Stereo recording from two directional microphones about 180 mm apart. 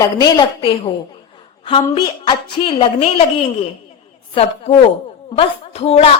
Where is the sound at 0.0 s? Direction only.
25° left (ahead or behind).